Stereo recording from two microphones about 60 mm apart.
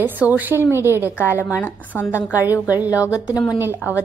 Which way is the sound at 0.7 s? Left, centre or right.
Right.